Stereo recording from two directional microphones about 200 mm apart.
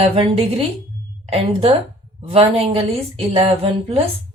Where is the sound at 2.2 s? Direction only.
30° right (ahead or behind).